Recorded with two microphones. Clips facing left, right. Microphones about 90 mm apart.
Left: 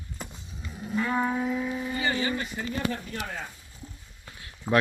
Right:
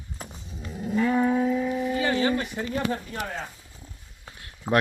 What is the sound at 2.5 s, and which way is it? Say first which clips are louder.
Speech: right 3 dB; 30° right (ahead or behind).